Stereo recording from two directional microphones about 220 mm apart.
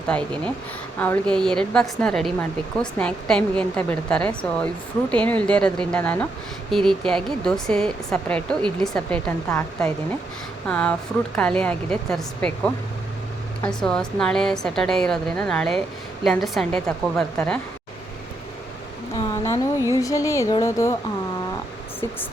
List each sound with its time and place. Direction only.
0.1 s a woman's voice: 5° left (ahead or behind)
19.1 s a sound: 20° left (ahead or behind)
20.0 s a woman's voice: 15° left (ahead or behind)